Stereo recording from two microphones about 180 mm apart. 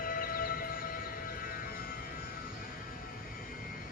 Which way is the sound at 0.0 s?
50° left (ahead or behind).